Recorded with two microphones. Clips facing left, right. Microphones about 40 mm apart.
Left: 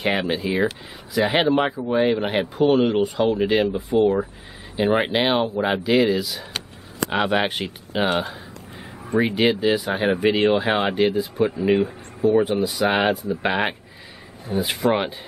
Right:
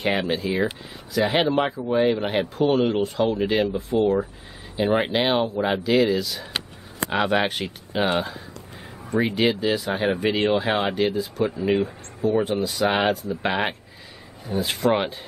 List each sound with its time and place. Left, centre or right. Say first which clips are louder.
0.0 s speech: left 1 dB; centre
4.7 s speech: left 2 dB; left
5.1 s speech: left 1 dB; centre